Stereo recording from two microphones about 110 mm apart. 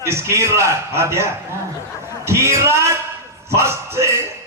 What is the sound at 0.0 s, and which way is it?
Speech, 25° right (ahead or behind).